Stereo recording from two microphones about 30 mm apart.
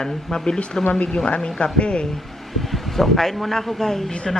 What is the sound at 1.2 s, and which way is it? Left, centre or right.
Speech, left.